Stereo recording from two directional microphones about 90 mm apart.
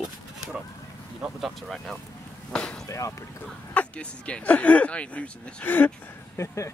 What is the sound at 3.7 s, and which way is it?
Speech, 15° left (ahead or behind).